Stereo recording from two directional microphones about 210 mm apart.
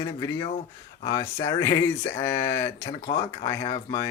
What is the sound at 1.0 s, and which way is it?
Speech, 20° left (ahead or behind).